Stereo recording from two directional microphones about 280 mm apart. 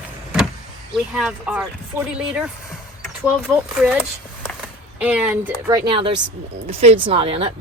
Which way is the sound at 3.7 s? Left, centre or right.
Centre.